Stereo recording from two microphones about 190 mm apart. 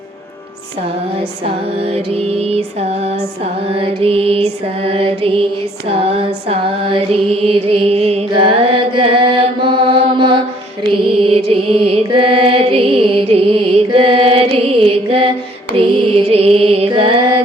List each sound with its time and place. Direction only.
1.5 s music: 30° right (ahead or behind)